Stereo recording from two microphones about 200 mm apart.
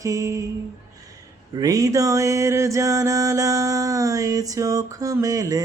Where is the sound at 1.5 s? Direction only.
20° right (ahead or behind).